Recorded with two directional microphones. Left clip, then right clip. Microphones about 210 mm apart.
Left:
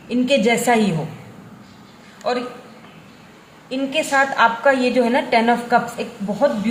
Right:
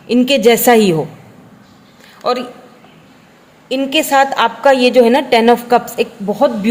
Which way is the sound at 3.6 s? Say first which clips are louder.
Right 7 dB; 50° right (ahead or behind).